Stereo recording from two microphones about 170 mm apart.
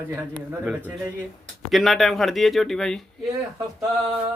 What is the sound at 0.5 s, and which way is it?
A man's voice, 10° right (ahead or behind).